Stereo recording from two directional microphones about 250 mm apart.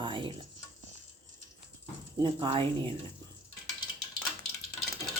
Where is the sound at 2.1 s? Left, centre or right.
Centre.